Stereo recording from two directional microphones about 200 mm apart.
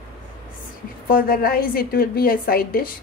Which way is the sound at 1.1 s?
45° left (ahead or behind).